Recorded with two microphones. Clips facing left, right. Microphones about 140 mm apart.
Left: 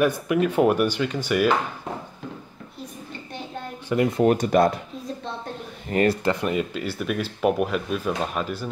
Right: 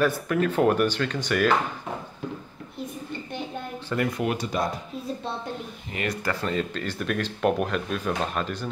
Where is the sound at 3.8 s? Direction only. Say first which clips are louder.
Left 6 dB; 20° left (ahead or behind).